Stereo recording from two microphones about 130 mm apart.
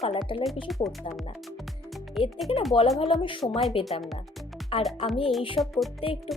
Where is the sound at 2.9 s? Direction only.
40° left (ahead or behind).